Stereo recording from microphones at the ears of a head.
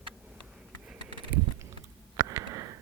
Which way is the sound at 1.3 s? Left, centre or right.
Right.